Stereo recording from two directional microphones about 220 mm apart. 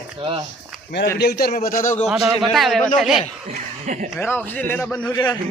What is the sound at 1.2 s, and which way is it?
Speech, 45° left (ahead or behind).